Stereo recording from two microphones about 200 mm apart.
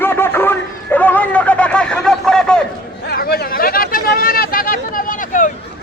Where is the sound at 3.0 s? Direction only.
50° left (ahead or behind).